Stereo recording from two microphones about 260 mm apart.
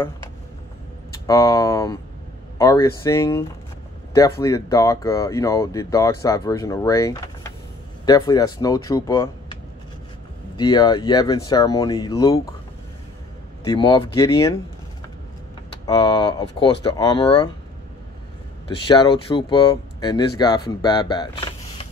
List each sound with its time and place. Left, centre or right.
1.2 s speech: centre
13.7 s speech: centre
15.8 s speech: centre
18.9 s speech: centre